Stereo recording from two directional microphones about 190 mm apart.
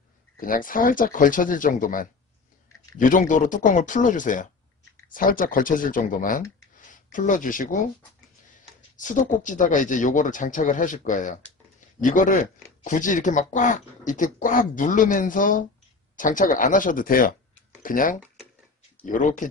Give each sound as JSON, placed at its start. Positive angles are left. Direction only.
{"t": 0.4, "sound": "speech", "side_deg": 45}
{"t": 9.0, "sound": "speech", "side_deg": 40}